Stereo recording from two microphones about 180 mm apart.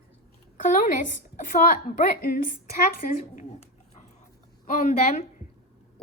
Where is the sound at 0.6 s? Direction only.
45° left (ahead or behind).